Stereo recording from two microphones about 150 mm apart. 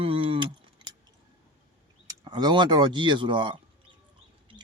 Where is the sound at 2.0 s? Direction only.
30° right (ahead or behind).